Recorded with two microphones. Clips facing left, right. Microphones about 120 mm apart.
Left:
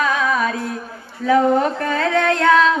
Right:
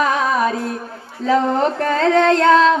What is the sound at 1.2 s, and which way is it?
Carnatic music, 25° right (ahead or behind).